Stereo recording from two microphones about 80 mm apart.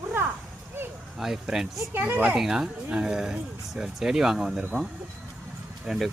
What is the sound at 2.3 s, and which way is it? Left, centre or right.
Speech, centre.